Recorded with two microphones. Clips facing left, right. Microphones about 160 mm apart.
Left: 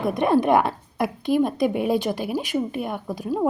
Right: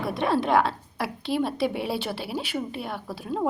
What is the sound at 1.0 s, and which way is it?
A woman's voice, 50° left (ahead or behind).